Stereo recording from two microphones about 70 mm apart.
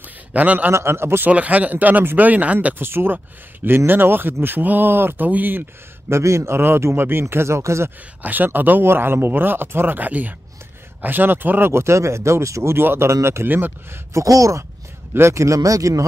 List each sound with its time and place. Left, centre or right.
0.3 s speech: right
0.7 s speech: right
1.3 s speech: right
2.9 s speech: right
6.0 s speech: right
8.2 s speech: right
11.7 s speech: right
13.5 s speech: right
14.1 s speech: right
15.1 s speech: right